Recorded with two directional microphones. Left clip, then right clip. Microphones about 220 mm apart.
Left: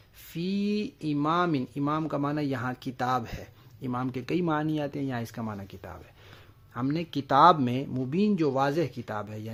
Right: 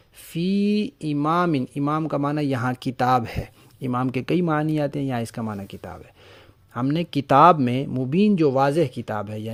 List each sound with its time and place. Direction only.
0.3 s speech: 30° right (ahead or behind)